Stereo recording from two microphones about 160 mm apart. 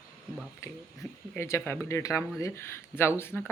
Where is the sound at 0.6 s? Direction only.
20° left (ahead or behind).